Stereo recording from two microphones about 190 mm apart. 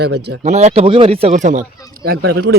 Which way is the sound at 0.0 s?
65° right (ahead or behind).